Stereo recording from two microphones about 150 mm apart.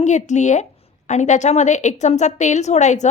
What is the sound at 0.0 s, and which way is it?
A woman's voice, 50° left (ahead or behind).